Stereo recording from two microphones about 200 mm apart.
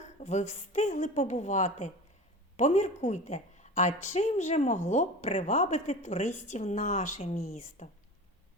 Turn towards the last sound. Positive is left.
turn(degrees=40)  # may be behind; listen again after turning